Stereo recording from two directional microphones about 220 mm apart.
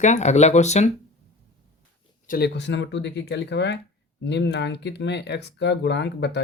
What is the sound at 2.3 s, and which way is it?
Speech, 45° left (ahead or behind).